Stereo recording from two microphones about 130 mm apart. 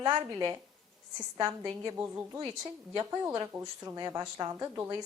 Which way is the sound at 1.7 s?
30° right (ahead or behind).